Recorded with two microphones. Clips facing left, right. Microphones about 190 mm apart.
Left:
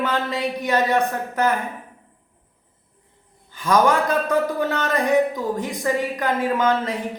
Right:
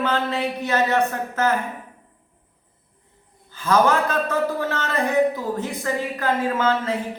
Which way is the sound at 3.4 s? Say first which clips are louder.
Left 1 dB; 15° left (ahead or behind).